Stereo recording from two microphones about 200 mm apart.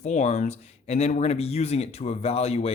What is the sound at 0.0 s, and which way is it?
Speech, 35° left (ahead or behind).